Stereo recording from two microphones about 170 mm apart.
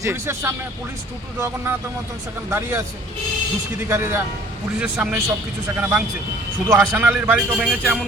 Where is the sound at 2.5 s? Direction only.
15° right (ahead or behind).